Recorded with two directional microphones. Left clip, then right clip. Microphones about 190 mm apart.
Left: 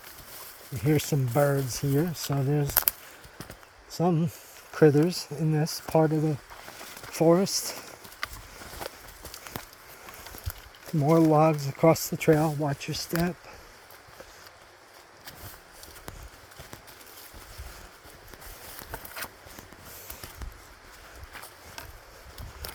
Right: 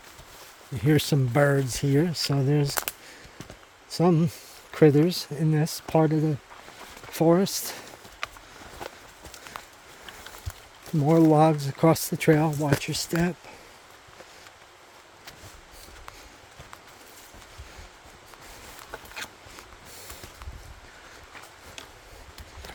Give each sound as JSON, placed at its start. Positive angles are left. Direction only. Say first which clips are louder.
{"t": 0.9, "sound": "speech", "louder": "right 3 dB", "side_deg": -35}
{"t": 3.9, "sound": "speech", "louder": "right 4 dB", "side_deg": -40}
{"t": 8.8, "sound": "walk", "louder": "even", "side_deg": 55}
{"t": 11.0, "sound": "speech", "louder": "right 2 dB", "side_deg": -25}